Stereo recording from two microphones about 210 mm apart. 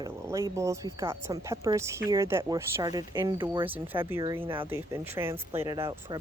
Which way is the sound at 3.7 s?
10° right (ahead or behind).